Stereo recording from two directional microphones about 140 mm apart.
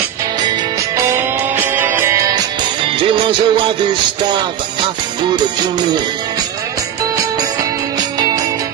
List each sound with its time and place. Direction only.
1.1 s music: 15° right (ahead or behind)
2.8 s music: 35° right (ahead or behind)